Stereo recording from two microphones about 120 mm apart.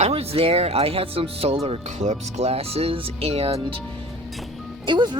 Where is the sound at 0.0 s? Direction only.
60° right (ahead or behind).